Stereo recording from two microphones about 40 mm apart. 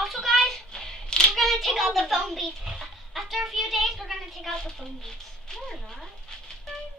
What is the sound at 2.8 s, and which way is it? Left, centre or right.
A child's voice, centre.